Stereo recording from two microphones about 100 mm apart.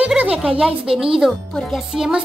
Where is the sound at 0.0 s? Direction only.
10° right (ahead or behind).